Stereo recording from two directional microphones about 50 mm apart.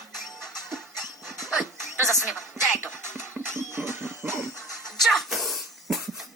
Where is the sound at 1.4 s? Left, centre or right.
Centre.